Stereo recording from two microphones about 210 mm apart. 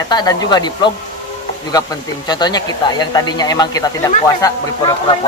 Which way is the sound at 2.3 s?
20° left (ahead or behind).